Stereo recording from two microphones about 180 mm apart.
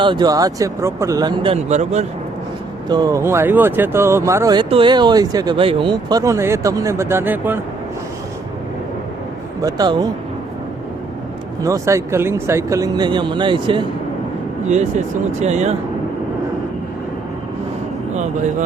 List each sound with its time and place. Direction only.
0.0 s speech: 25° right (ahead or behind)
2.9 s speech: 20° right (ahead or behind)
9.6 s speech: 20° right (ahead or behind)
11.6 s speech: 15° right (ahead or behind)
14.7 s speech: 40° right (ahead or behind)
18.1 s speech: 40° right (ahead or behind)